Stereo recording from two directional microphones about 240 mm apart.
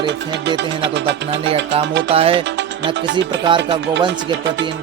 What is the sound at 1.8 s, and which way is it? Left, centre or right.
Speech, right.